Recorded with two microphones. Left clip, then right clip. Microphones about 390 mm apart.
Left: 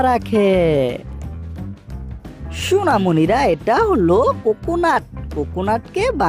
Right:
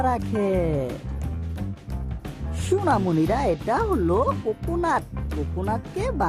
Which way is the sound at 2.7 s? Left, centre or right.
Centre.